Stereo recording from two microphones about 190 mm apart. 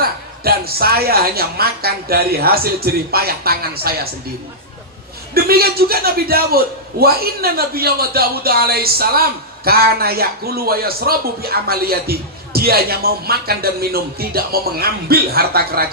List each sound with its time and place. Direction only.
0.0 s a man's voice: 55° right (ahead or behind)
5.3 s a man's voice: 55° right (ahead or behind)